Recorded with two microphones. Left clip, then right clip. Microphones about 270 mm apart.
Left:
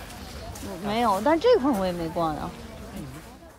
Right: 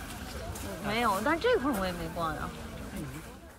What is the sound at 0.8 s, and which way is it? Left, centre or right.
Speech, centre.